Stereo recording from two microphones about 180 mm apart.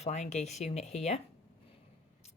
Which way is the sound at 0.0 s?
40° left (ahead or behind).